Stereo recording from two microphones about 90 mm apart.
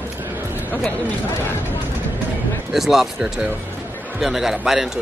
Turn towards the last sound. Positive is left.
turn(degrees=-5)  # may be behind; listen again after turning